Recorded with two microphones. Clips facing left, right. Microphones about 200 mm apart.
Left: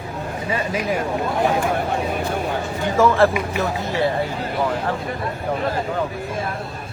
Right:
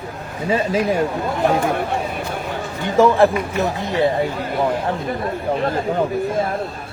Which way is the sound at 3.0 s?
15° right (ahead or behind).